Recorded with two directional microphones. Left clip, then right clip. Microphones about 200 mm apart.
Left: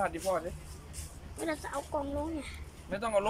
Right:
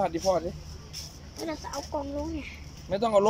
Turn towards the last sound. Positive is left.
turn(degrees=-25)  # may be behind; listen again after turning